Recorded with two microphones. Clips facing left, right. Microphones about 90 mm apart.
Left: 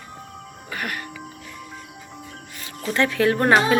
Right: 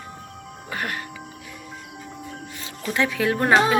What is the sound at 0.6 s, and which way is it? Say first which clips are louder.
Speech: right 1 dB; 25° right (ahead or behind).